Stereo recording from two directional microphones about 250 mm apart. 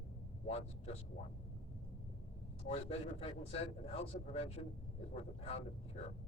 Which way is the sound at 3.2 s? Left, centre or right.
Left.